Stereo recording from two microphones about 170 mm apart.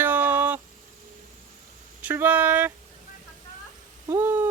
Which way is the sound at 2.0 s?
10° right (ahead or behind).